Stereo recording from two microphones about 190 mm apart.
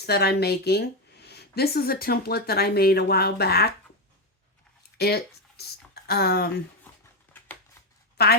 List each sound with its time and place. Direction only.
0.0 s speech: 55° left (ahead or behind)
4.9 s a sound: 60° left (ahead or behind)
8.2 s speech: 55° left (ahead or behind)